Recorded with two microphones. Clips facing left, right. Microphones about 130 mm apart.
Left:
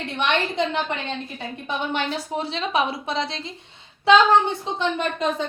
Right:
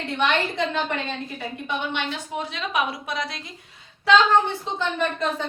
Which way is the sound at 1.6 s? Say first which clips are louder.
Left 3 dB; 35° left (ahead or behind).